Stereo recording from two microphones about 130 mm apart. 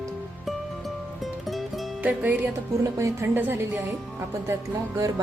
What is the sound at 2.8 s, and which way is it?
Speech, 25° right (ahead or behind).